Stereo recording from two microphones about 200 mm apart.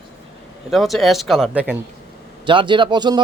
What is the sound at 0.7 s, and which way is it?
Speech, centre (ahead or behind).